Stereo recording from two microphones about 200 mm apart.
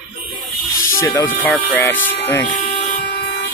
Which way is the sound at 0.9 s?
15° left (ahead or behind).